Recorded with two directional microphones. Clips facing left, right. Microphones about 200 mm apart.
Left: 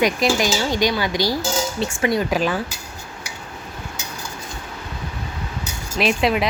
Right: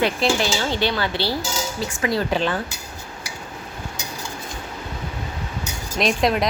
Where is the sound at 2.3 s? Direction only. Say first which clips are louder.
Left 1 dB; 10° left (ahead or behind).